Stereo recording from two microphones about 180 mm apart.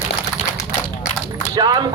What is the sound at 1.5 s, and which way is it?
Speech, 20° right (ahead or behind).